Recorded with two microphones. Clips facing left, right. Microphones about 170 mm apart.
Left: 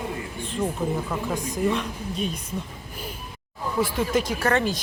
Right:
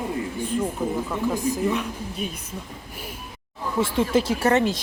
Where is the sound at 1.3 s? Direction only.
10° right (ahead or behind).